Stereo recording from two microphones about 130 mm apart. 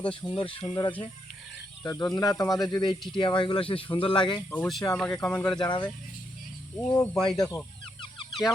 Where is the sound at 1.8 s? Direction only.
25° left (ahead or behind).